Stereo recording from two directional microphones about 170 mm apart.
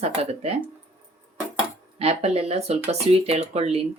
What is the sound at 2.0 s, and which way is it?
Speech, 35° right (ahead or behind).